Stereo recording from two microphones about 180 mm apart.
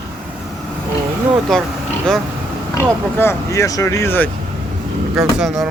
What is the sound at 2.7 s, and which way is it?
Speech, 15° left (ahead or behind).